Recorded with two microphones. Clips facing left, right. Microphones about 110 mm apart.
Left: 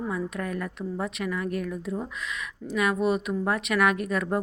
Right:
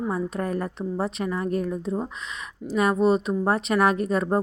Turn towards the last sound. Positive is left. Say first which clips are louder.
# right 4 dB
turn(degrees=-30)  # may be behind; listen again after turning